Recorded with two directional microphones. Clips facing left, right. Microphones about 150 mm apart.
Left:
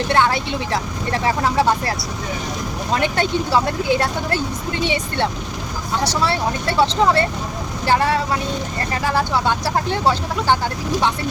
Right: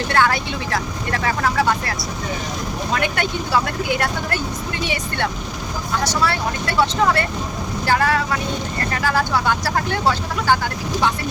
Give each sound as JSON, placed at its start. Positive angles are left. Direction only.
{"t": 0.1, "sound": "speech", "side_deg": 25}